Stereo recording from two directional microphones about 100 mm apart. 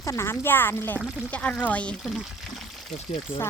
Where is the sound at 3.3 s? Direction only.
70° left (ahead or behind).